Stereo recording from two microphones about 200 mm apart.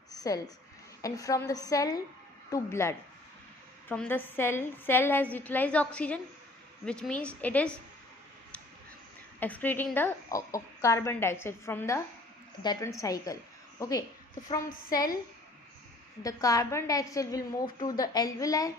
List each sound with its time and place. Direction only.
0.1 s a sound: 20° left (ahead or behind)
1.0 s a woman's voice: 15° left (ahead or behind)
9.4 s a woman's voice: 10° left (ahead or behind)
16.2 s a woman's voice: 15° left (ahead or behind)